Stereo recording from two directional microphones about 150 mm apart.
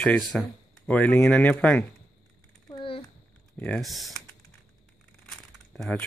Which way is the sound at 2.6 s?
35° left (ahead or behind).